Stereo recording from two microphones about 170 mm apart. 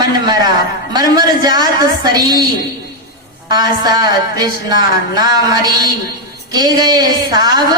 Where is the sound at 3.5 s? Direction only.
25° right (ahead or behind).